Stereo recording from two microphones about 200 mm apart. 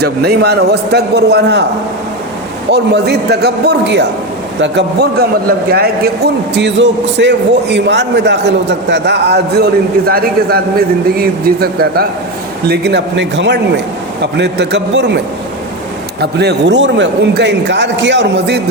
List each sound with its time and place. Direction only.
0.0 s a man's voice: 55° right (ahead or behind)
2.7 s a man's voice: 55° right (ahead or behind)
16.2 s a man's voice: 55° right (ahead or behind)